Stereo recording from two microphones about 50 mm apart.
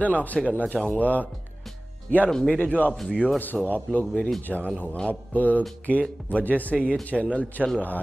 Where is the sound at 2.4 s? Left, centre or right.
Left.